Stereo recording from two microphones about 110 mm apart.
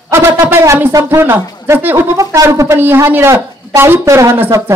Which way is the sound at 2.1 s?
30° right (ahead or behind).